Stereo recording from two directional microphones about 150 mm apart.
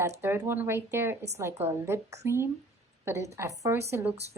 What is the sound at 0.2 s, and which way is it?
A woman's voice, 15° right (ahead or behind).